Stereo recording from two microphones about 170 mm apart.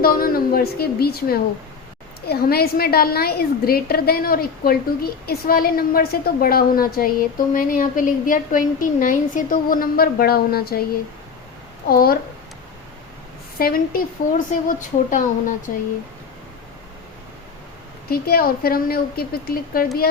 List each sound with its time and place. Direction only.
0.0 s a woman's voice: 60° left (ahead or behind)
11.9 s a woman's voice: 60° left (ahead or behind)
13.6 s speech: 60° left (ahead or behind)
18.1 s a woman's voice: 60° left (ahead or behind)